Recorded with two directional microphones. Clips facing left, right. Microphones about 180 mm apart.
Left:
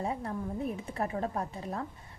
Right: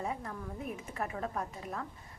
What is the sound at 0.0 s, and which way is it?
A woman's voice, 30° left (ahead or behind).